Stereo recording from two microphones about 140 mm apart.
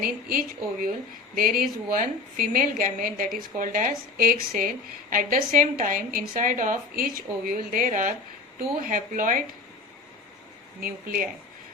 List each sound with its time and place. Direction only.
0.0 s a woman's voice: 90° right
5.1 s a woman's voice: 75° right (ahead or behind)
10.8 s a woman's voice: 90° right